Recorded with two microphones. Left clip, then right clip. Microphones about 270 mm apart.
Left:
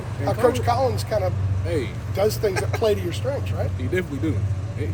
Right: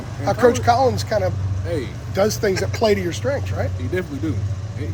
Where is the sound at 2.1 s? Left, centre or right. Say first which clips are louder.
Right 3 dB; right.